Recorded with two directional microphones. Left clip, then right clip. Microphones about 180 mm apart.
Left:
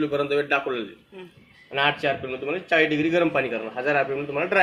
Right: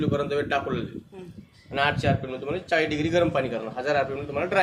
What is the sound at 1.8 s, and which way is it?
Speech, 30° left (ahead or behind).